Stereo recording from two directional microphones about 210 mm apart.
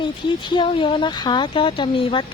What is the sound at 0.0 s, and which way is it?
Speech, 20° left (ahead or behind).